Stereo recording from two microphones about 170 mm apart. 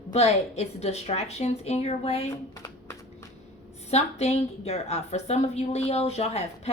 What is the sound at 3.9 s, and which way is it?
A woman's voice, 40° left (ahead or behind).